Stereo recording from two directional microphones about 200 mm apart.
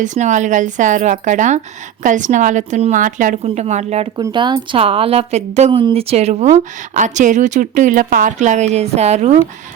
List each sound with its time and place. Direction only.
0.0 s a woman's voice: 35° right (ahead or behind)
4.2 s a woman's voice: 20° right (ahead or behind)